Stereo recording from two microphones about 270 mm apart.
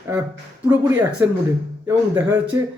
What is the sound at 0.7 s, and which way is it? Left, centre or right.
Speech, centre.